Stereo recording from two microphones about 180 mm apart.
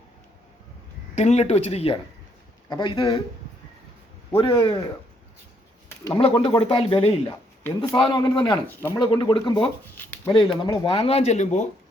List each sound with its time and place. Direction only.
1.1 s speech: 40° left (ahead or behind)
4.4 s speech: 30° left (ahead or behind)
6.1 s speech: 30° left (ahead or behind)
8.6 s speech: 10° left (ahead or behind)
9.0 s speech: 25° left (ahead or behind)
9.8 s a sound: 10° left (ahead or behind)
10.6 s speech: 25° left (ahead or behind)